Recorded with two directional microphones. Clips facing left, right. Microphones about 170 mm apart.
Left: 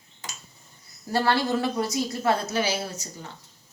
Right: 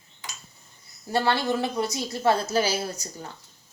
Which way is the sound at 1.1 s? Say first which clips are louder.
Left 1 dB; 20° right (ahead or behind).